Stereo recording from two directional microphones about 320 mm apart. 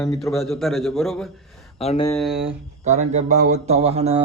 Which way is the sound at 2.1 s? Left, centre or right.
Centre.